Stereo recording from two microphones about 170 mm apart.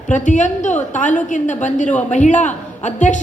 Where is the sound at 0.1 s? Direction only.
45° left (ahead or behind).